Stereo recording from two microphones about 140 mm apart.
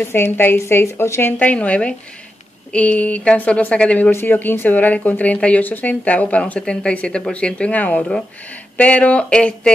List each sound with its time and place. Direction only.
0.0 s speech: 15° left (ahead or behind)